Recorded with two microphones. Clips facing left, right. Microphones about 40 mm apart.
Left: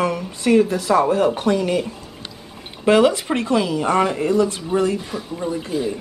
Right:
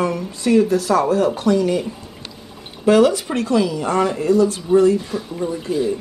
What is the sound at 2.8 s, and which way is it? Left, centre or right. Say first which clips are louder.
A woman's voice: right 1 dB; left.